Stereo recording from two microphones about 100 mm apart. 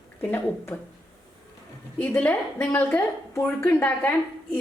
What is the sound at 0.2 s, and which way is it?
Speech, 25° left (ahead or behind).